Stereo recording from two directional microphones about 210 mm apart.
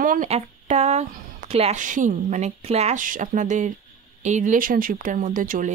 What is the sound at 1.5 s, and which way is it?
A woman's voice, 30° right (ahead or behind).